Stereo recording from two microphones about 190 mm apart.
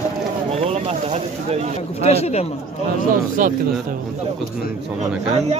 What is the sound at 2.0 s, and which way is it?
Speech, 35° left (ahead or behind).